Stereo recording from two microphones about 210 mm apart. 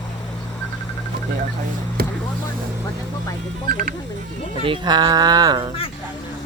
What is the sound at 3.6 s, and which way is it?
Speech, 40° right (ahead or behind).